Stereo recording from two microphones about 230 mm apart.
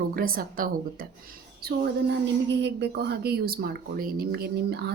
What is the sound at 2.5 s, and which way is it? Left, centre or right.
Speech, right.